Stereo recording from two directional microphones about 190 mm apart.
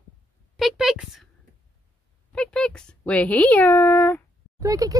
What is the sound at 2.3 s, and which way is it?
Speech, 5° left (ahead or behind).